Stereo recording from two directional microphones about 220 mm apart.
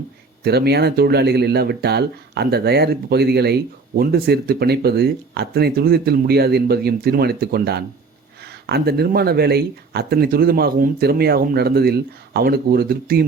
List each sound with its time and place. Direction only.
0.4 s speech: 45° right (ahead or behind)